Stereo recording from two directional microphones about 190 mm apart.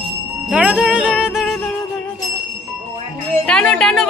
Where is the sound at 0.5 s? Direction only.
5° right (ahead or behind).